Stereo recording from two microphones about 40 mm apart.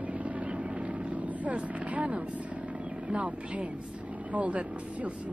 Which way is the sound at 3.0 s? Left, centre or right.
Right.